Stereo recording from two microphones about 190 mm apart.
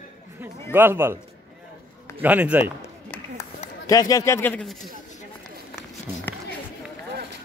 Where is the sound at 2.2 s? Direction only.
10° right (ahead or behind).